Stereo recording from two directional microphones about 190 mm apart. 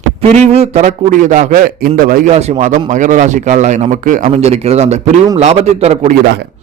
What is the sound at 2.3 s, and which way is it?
A man's voice, 35° right (ahead or behind).